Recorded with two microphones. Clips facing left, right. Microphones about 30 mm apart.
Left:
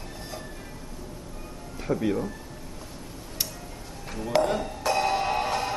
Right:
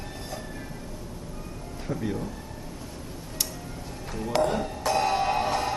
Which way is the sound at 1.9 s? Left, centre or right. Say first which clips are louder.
Left 5 dB; left.